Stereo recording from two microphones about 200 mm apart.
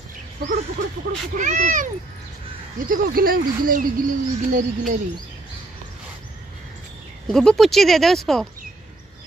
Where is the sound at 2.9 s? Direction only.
45° right (ahead or behind).